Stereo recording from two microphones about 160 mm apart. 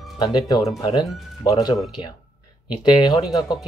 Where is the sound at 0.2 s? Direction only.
25° left (ahead or behind).